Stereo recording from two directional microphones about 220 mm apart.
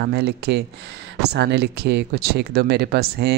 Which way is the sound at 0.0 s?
50° right (ahead or behind).